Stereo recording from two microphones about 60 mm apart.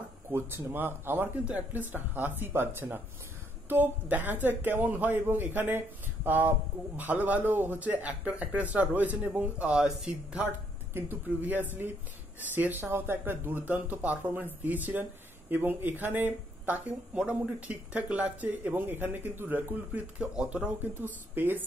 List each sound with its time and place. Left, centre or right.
0.3 s speech: right; by 10.5 s centre
10.9 s speech: right; by 20.7 s centre
21.4 s speech: right